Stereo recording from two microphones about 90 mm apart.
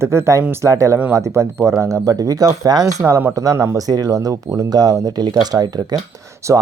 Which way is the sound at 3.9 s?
45° right (ahead or behind).